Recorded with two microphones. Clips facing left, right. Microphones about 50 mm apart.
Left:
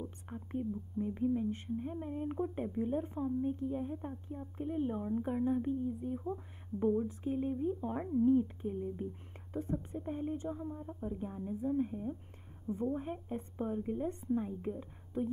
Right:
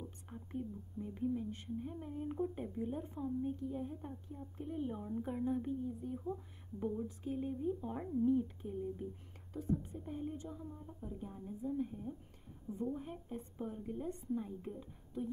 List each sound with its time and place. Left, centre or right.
0.0 s whispering: left
1.2 s a woman's voice: left